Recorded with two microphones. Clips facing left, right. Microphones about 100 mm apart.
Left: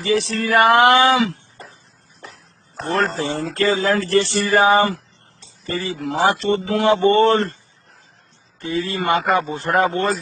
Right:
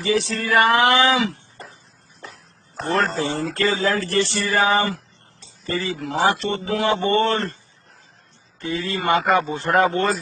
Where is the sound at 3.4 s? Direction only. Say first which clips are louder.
Left 4 dB; 50° left (ahead or behind).